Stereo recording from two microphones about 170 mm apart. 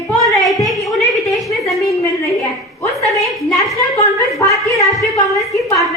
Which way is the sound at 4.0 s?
20° left (ahead or behind).